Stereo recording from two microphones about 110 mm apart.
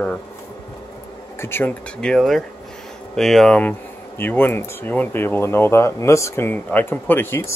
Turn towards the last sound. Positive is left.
turn(degrees=20)  # may be behind; listen again after turning